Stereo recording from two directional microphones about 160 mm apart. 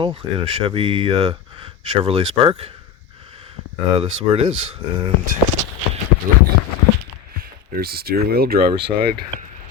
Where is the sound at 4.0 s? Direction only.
40° right (ahead or behind).